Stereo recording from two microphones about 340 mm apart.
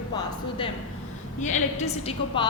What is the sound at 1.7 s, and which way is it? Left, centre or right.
Speech, centre.